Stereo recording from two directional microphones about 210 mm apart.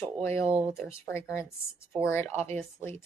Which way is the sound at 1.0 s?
10° left (ahead or behind).